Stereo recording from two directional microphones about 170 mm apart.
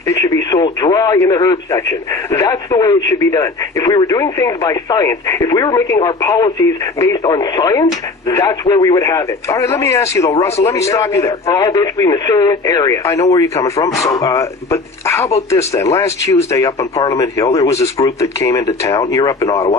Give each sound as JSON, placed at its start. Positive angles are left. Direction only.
{"t": 0.1, "sound": "speech", "side_deg": 20}